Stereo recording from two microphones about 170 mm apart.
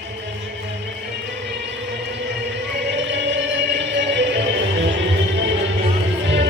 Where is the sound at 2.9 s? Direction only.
90° right.